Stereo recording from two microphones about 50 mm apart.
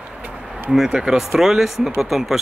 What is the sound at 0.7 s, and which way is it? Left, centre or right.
Speech, centre.